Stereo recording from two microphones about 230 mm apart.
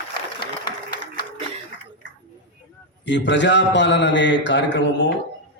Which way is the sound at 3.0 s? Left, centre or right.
Left.